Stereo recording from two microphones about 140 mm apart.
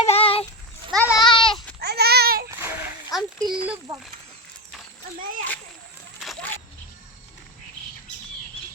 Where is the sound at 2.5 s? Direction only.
15° right (ahead or behind).